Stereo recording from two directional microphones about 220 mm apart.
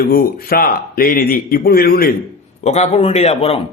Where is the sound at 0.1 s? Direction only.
45° left (ahead or behind).